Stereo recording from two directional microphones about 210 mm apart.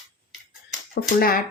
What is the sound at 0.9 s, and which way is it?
Speech, 45° left (ahead or behind).